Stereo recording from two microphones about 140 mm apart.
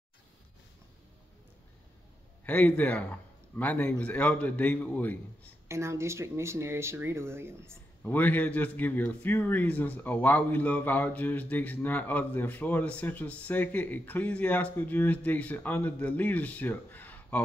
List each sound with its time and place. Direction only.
2.4 s a man's voice: 10° left (ahead or behind)
5.7 s speech: 20° right (ahead or behind)
8.0 s a man's voice: 10° left (ahead or behind)